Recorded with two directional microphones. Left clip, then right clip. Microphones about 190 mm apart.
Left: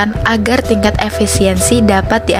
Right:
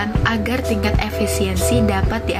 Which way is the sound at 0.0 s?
45° left (ahead or behind).